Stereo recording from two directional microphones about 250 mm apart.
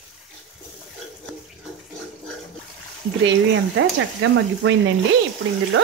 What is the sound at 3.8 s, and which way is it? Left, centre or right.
Speech, right.